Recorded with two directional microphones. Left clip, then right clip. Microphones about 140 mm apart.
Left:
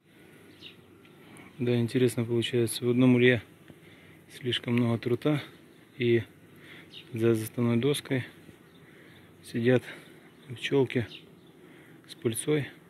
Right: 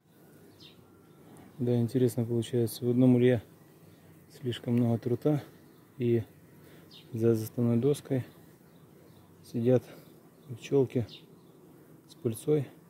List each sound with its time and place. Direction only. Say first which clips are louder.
1.6 s speech: left 2 dB; 20° right (ahead or behind)
9.5 s speech: left 1 dB; 15° right (ahead or behind)
12.2 s speech: even; 15° right (ahead or behind)